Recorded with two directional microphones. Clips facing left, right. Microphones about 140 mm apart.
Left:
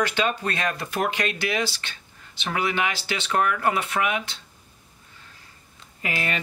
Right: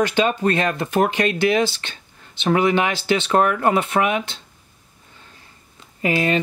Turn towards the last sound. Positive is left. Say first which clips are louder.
# right 9 dB
turn(degrees=-30)  # may be behind; listen again after turning